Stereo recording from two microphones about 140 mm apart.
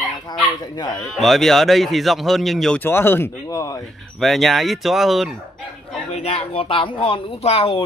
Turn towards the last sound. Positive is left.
turn(degrees=45)  # may be behind; listen again after turning